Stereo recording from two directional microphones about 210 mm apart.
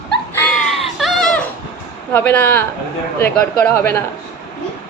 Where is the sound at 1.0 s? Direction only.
Centre (ahead or behind).